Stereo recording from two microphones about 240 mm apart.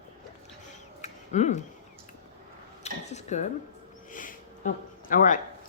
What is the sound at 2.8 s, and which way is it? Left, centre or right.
Cutlery, left.